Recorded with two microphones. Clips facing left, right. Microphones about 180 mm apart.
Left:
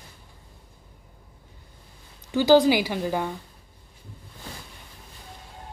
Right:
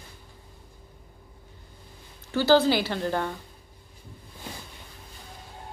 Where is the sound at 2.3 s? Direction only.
15° left (ahead or behind).